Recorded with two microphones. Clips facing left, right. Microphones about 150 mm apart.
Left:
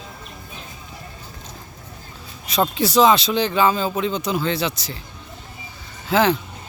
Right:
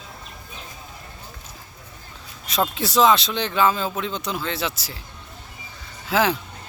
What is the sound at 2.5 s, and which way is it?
Speech, centre (ahead or behind).